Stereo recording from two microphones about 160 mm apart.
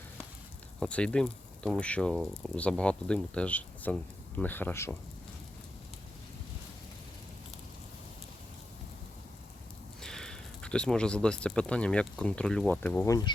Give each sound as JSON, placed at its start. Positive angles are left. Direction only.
{"t": 0.8, "sound": "speech", "side_deg": 5}
{"t": 10.0, "sound": "speech", "side_deg": 5}
{"t": 13.1, "sound": "speech", "side_deg": 25}